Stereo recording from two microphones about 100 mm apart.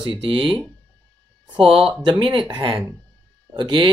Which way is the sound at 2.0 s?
55° right (ahead or behind).